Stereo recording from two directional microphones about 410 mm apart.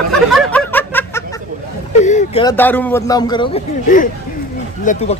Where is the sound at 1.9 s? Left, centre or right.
Centre.